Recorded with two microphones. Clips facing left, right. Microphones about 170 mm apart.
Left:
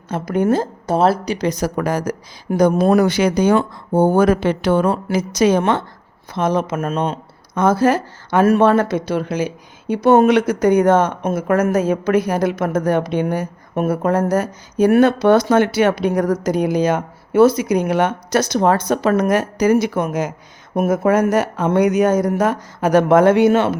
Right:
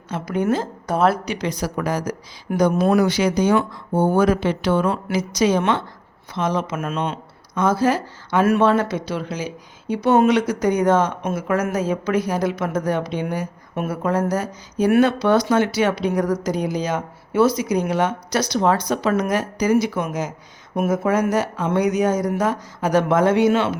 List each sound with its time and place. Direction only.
0.1 s speech: 50° left (ahead or behind)
0.9 s speech: 30° left (ahead or behind)
7.5 s speech: 55° left (ahead or behind)